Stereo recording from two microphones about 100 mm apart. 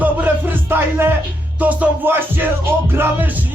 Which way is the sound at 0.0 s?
15° right (ahead or behind).